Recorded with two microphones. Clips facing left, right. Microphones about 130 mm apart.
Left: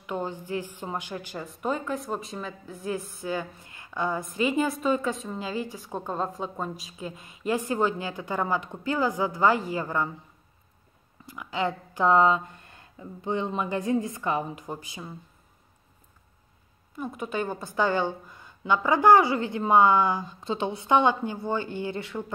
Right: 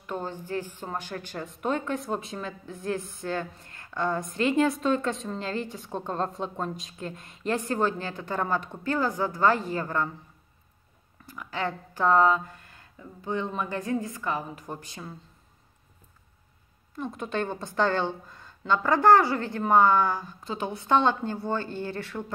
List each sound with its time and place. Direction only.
0.0 s speech: 15° left (ahead or behind)
11.2 s speech: 15° left (ahead or behind)
14.7 s speech: 10° left (ahead or behind)
16.9 s speech: 5° left (ahead or behind)